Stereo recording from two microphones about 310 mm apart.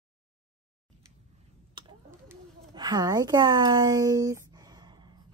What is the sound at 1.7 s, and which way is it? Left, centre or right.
Speech, centre.